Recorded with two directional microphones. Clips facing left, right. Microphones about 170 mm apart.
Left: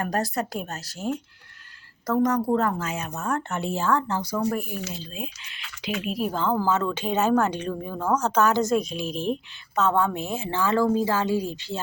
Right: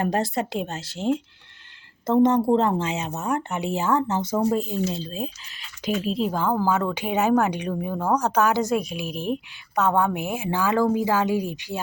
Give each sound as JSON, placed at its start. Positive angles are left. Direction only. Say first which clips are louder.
{"t": 0.0, "sound": "a woman's voice", "louder": "right 3 dB", "side_deg": -25}
{"t": 4.9, "sound": "speech", "louder": "right 6 dB", "side_deg": -35}
{"t": 6.3, "sound": "a woman's voice", "louder": "left 1 dB", "side_deg": -10}